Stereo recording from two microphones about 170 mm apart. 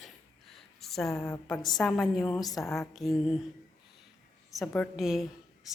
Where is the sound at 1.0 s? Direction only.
15° left (ahead or behind).